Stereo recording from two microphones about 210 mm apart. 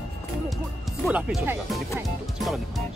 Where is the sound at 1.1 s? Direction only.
5° right (ahead or behind).